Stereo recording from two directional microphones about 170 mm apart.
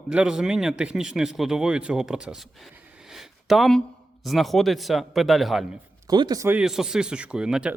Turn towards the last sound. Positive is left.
turn(degrees=-5)  # may be behind; listen again after turning